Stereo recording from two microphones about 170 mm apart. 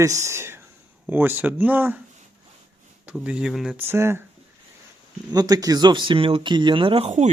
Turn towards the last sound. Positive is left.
turn(degrees=-40)  # may be behind; listen again after turning